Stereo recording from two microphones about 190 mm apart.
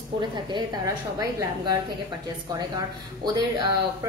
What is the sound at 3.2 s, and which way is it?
Speech, 20° right (ahead or behind).